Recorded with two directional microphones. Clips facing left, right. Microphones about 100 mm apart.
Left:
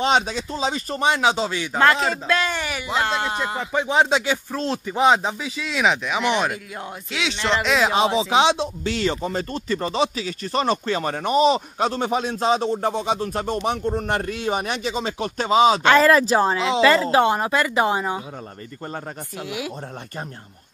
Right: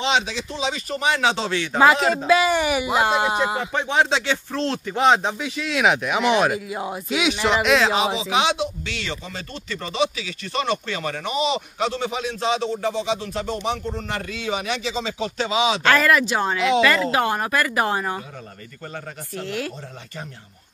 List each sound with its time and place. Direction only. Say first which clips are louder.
0.0 s speech: left 2 dB; 45° left (ahead or behind)
1.1 s speech: left 1 dB; 15° left (ahead or behind)
1.8 s speech: right 2 dB; 5° right (ahead or behind)
3.7 s speech: left 4 dB; 15° left (ahead or behind); by 7.8 s 5° right (ahead or behind)
8.2 s speech: left 3 dB; 30° left (ahead or behind)
8.8 s speech: left 8 dB; 40° left (ahead or behind)
15.8 s speech: left 3 dB; 25° left (ahead or behind)
19.3 s speech: right 2 dB; 10° left (ahead or behind)